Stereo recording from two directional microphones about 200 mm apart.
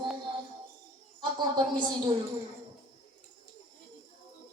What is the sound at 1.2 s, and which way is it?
Speech, 20° right (ahead or behind).